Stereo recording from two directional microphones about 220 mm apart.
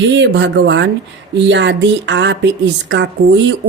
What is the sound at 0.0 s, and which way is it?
Speech, 55° right (ahead or behind).